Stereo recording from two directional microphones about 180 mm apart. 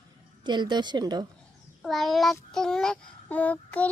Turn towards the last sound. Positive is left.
turn(degrees=10)  # may be behind; listen again after turning